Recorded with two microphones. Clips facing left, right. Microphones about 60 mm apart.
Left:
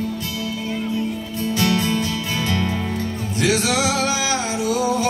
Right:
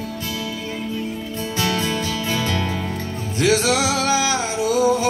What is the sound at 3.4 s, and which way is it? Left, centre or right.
Music, right.